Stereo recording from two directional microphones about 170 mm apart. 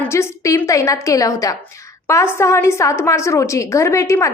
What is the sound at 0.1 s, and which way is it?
A woman's voice, 15° left (ahead or behind).